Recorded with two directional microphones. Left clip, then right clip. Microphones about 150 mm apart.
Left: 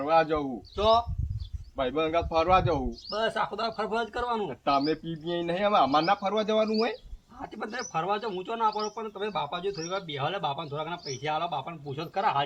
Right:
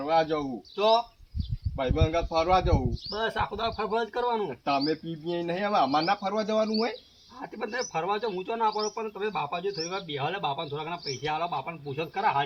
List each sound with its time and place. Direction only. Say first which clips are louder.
0.0 s a man's voice: left 1 dB; 15° right (ahead or behind)
0.8 s a man's voice: even; 5° left (ahead or behind)
3.1 s a man's voice: left 1 dB; 20° left (ahead or behind)
4.8 s a man's voice: even; 5° left (ahead or behind)
7.4 s a man's voice: right 3 dB; 20° left (ahead or behind)